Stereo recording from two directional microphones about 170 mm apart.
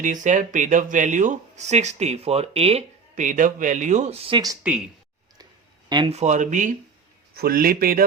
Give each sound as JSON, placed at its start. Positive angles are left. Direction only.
{"t": 0.0, "sound": "speech", "side_deg": -50}
{"t": 5.9, "sound": "speech", "side_deg": -30}
{"t": 6.1, "sound": "speech", "side_deg": -45}
{"t": 7.3, "sound": "speech", "side_deg": -60}